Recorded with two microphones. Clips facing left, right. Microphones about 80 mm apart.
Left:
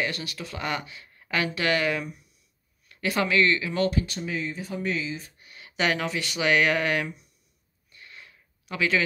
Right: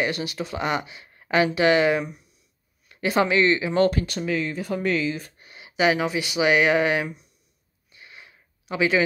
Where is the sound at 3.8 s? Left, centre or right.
Right.